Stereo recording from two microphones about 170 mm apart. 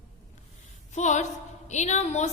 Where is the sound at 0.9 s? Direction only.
45° left (ahead or behind).